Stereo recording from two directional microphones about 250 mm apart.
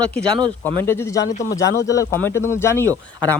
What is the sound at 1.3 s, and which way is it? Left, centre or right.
Speech, left.